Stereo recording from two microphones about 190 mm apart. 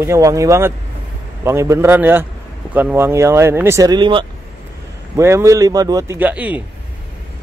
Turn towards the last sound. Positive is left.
turn(degrees=-10)  # may be behind; listen again after turning